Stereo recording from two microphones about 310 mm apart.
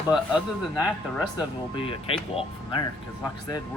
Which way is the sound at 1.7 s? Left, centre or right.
Centre.